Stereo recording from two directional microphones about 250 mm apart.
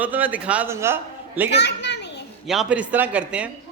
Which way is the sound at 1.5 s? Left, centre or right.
Left.